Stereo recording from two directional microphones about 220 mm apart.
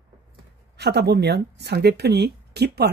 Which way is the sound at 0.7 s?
50° right (ahead or behind).